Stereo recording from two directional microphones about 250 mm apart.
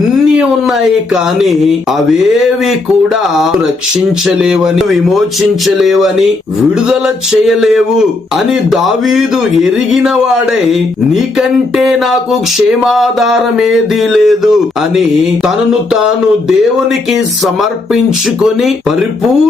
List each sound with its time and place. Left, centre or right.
0.3 s speech: centre
4.3 s speech: centre
7.4 s speech: centre
10.7 s speech: centre
17.1 s speech: centre